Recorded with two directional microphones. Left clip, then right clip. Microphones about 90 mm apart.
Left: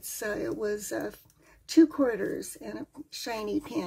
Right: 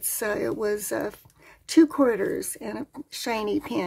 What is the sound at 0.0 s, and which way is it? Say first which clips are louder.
A woman's voice: right 6 dB; 55° right (ahead or behind).